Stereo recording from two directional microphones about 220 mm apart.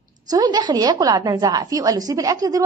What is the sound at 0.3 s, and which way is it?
A woman's voice, 20° right (ahead or behind).